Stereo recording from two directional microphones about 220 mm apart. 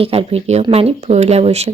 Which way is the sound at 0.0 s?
25° right (ahead or behind).